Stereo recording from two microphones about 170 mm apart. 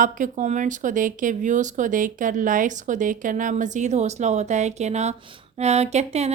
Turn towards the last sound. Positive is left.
turn(degrees=-40)  # may be behind; listen again after turning